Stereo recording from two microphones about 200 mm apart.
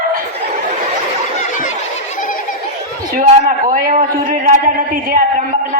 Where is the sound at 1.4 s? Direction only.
40° left (ahead or behind).